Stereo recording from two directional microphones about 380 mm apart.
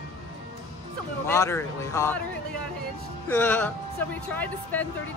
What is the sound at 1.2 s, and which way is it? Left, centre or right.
Speech, centre.